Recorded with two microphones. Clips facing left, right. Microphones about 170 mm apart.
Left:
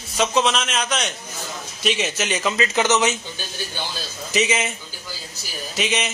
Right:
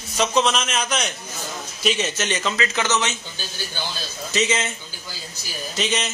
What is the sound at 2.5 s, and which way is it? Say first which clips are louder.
Speech: left 3 dB; 20° left (ahead or behind).